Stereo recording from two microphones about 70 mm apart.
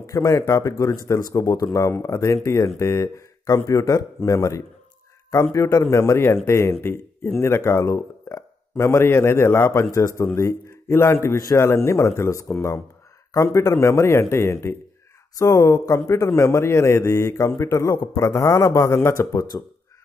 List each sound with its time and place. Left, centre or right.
0.0 s speech: left
11.3 s speech: left
11.6 s speech: left
15.3 s speech: left
16.1 s speech: left